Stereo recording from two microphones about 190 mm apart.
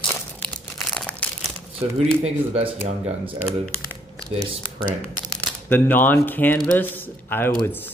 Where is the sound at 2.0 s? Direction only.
35° right (ahead or behind).